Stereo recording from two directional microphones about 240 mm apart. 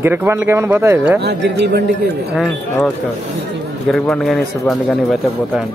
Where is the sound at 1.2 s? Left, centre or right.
Right.